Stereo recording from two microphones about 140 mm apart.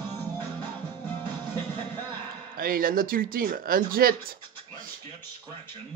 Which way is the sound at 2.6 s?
90° right.